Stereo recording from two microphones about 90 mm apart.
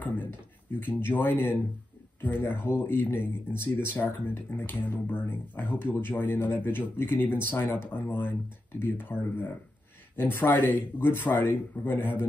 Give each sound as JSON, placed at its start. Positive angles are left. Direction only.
{"t": 0.0, "sound": "speech", "side_deg": 20}